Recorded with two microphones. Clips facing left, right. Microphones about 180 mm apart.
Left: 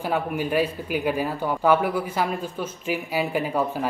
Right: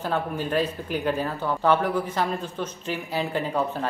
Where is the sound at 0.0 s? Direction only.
10° left (ahead or behind).